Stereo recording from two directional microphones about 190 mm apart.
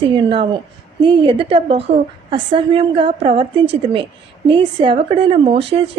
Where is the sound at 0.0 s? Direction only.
25° right (ahead or behind).